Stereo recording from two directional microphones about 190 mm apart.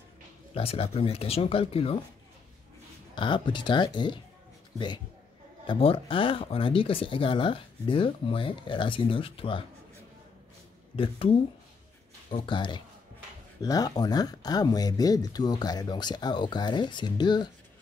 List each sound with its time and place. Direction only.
0.6 s speech: 30° left (ahead or behind)
3.2 s speech: 25° left (ahead or behind)
11.0 s speech: 30° left (ahead or behind)